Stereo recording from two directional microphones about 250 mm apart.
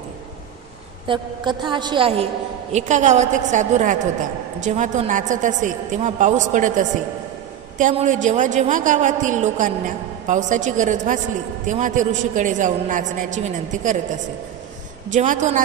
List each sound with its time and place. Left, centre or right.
1.0 s a woman's voice: centre